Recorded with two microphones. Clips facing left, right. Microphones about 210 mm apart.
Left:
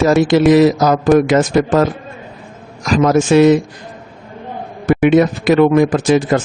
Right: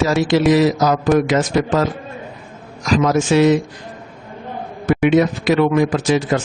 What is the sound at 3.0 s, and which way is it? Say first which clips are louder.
Speech: left 5 dB; 50° left (ahead or behind).